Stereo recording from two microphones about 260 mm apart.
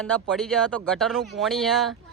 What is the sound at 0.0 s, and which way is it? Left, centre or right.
Speech, centre.